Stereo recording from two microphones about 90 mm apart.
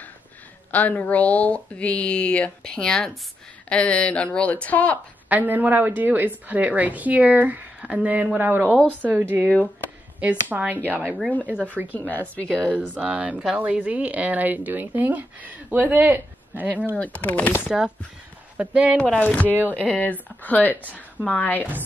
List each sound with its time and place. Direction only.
0.7 s speech: 20° left (ahead or behind)
5.3 s a woman's voice: 20° right (ahead or behind)
11.0 s a woman's voice: 5° left (ahead or behind)
11.4 s a woman's voice: 15° right (ahead or behind)
11.9 s speech: 20° left (ahead or behind)
12.6 s a woman's voice: 15° right (ahead or behind)
16.9 s speech: 15° left (ahead or behind)
17.6 s a woman's voice: 10° right (ahead or behind)
19.1 s speech: 15° left (ahead or behind)